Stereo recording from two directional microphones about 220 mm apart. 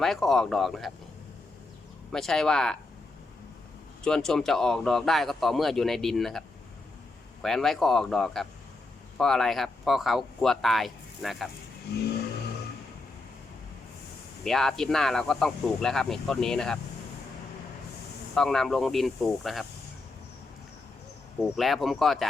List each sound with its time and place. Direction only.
0.0 s speech: centre (ahead or behind)
2.1 s speech: centre (ahead or behind)
4.0 s speech: 5° left (ahead or behind)
7.4 s speech: centre (ahead or behind)
11.9 s vehicle: 45° left (ahead or behind)
14.4 s speech: centre (ahead or behind)
18.3 s speech: centre (ahead or behind)
21.4 s speech: centre (ahead or behind)